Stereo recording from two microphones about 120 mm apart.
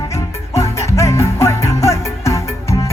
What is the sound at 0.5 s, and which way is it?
Music, 25° left (ahead or behind).